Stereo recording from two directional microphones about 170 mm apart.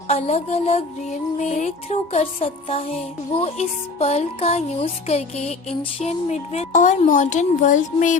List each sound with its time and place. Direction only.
0.1 s music: 40° left (ahead or behind)